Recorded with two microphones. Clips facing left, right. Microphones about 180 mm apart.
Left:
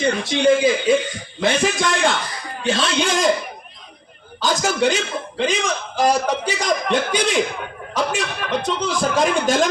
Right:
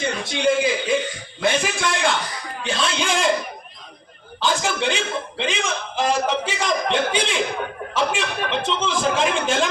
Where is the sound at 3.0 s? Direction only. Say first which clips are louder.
Left 2 dB; 40° left (ahead or behind).